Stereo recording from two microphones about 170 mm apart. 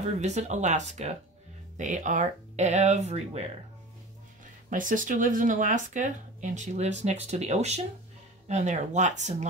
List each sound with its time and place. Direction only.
0.2 s speech: 45° right (ahead or behind)
4.6 s speech: 50° right (ahead or behind)